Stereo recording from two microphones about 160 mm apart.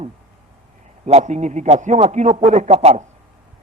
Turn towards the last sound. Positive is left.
turn(degrees=-45)  # may be behind; listen again after turning